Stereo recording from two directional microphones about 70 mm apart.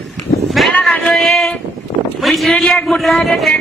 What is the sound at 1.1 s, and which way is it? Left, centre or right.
A man's voice, centre.